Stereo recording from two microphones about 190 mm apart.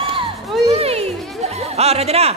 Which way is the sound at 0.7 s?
30° right (ahead or behind).